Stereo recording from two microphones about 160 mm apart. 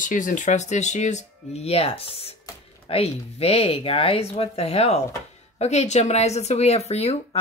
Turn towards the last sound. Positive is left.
turn(degrees=40)  # may be behind; listen again after turning